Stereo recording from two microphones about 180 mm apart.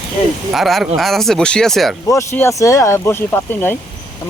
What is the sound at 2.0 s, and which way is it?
Speech, 15° left (ahead or behind).